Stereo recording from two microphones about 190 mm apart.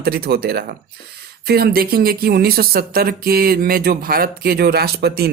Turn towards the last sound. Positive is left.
turn(degrees=-55)  # may be behind; listen again after turning